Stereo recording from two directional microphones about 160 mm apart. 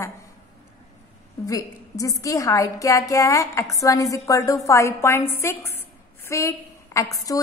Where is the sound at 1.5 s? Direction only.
20° left (ahead or behind).